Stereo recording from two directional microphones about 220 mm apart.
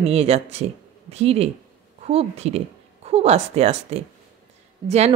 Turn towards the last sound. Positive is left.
turn(degrees=-30)  # may be behind; listen again after turning